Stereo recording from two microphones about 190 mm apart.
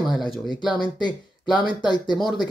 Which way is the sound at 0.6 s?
25° left (ahead or behind).